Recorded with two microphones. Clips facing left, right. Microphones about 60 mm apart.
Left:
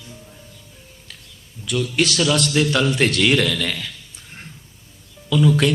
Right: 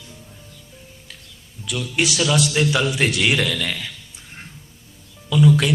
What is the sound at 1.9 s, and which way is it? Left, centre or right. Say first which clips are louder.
A man's voice: even; centre.